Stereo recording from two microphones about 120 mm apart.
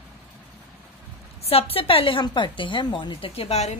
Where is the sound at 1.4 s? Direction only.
55° left (ahead or behind).